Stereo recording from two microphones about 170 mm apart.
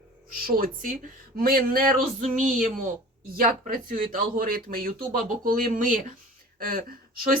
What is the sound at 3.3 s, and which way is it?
A woman's voice, 55° right (ahead or behind).